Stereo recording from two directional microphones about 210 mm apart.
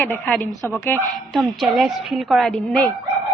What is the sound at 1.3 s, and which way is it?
A woman's voice, centre (ahead or behind).